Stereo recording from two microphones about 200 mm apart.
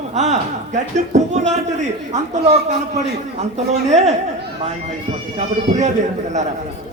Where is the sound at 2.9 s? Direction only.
35° right (ahead or behind).